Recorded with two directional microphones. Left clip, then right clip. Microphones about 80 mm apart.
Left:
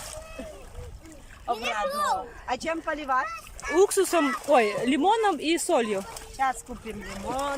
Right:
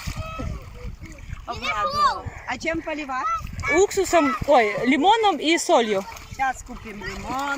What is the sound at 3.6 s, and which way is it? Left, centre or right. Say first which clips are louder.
Speech: right 2 dB; left.